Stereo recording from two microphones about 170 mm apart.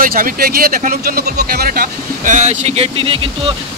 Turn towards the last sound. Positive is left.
turn(degrees=-30)  # may be behind; listen again after turning